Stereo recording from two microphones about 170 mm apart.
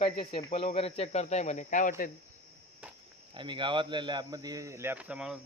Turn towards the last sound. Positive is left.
turn(degrees=-5)  # may be behind; listen again after turning